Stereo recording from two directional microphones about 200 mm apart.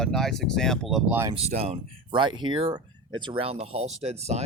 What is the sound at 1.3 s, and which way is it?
Speech, 30° right (ahead or behind).